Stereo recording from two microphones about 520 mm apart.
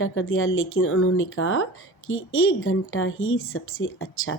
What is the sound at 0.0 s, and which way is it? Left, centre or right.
Speech, left.